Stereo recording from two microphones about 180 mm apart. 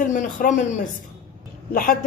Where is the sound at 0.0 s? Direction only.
50° left (ahead or behind).